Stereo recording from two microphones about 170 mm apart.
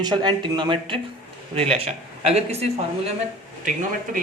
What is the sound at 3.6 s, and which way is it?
Speech, 50° right (ahead or behind).